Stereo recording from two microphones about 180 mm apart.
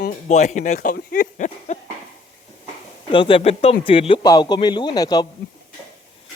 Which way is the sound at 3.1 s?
30° left (ahead or behind).